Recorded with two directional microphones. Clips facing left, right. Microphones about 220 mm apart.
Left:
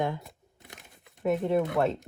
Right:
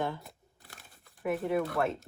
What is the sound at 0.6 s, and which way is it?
Crumpling, 20° left (ahead or behind).